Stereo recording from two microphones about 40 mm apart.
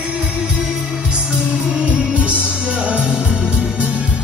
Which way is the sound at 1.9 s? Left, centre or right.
Right.